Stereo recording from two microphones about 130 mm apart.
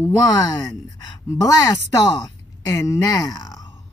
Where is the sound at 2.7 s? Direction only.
25° left (ahead or behind).